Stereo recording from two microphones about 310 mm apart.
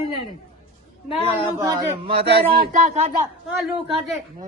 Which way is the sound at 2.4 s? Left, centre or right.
Right.